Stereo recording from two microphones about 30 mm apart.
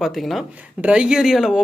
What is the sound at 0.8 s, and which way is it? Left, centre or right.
Speech, right.